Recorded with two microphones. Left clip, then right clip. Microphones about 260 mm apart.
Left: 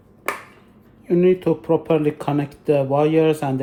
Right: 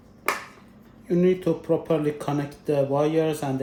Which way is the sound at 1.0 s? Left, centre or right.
Centre.